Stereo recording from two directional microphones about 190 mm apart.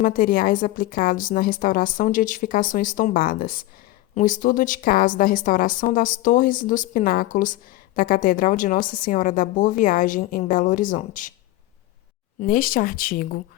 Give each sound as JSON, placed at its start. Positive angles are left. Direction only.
{"t": 0.0, "sound": "a woman's voice", "side_deg": 50}
{"t": 12.4, "sound": "a woman's voice", "side_deg": 50}